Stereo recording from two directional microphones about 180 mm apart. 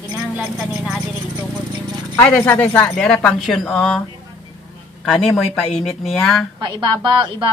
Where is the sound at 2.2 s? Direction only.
10° left (ahead or behind).